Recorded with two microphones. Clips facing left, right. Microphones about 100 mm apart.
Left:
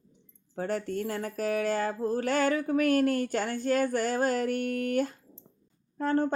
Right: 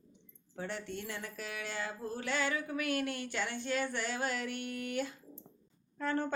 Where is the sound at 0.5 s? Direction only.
45° left (ahead or behind).